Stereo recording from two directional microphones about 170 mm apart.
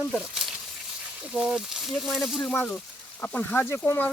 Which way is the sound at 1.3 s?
5° right (ahead or behind).